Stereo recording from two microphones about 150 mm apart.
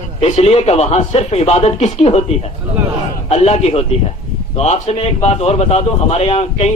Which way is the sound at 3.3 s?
45° left (ahead or behind).